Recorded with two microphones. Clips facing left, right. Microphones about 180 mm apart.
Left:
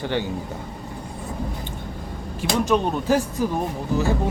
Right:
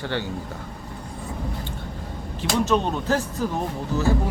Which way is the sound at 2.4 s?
10° left (ahead or behind).